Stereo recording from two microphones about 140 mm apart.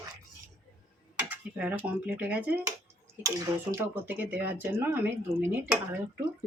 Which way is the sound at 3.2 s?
25° right (ahead or behind).